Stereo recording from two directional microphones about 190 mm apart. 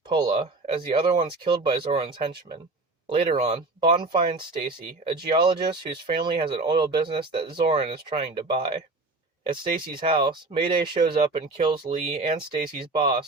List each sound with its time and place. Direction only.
0.1 s a sound: 20° right (ahead or behind)
0.3 s speech: 35° right (ahead or behind)
10.0 s speech: 25° right (ahead or behind)
12.9 s speech: 25° right (ahead or behind)